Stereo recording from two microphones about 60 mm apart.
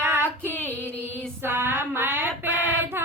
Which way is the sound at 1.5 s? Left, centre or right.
Right.